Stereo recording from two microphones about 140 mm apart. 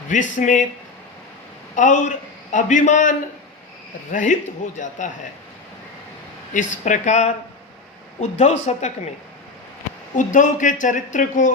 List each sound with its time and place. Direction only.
0.1 s speech: 65° left (ahead or behind)
1.7 s a man's voice: 60° left (ahead or behind)
6.5 s speech: 65° left (ahead or behind)
10.2 s speech: 65° left (ahead or behind)